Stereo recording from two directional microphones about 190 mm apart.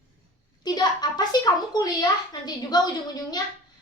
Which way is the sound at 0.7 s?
20° left (ahead or behind).